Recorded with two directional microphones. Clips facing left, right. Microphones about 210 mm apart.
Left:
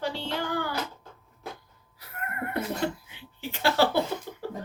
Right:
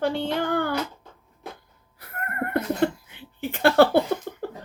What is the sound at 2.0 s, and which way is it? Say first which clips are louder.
Neigh: right 4 dB; 55° right (ahead or behind).